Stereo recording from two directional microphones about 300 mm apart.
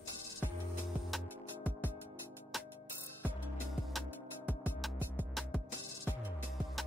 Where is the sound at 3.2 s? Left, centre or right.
Centre.